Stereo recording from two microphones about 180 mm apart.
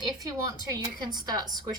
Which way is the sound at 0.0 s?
20° right (ahead or behind).